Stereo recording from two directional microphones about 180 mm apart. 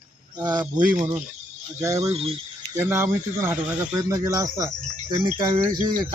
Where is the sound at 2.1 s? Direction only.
35° right (ahead or behind).